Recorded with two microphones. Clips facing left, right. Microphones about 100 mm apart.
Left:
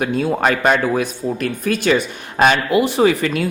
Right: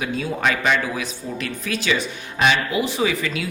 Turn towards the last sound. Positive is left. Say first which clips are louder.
# left 7 dB
turn(degrees=50)  # may be behind; listen again after turning